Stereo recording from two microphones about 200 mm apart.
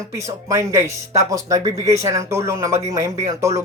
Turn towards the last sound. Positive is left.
turn(degrees=-15)  # may be behind; listen again after turning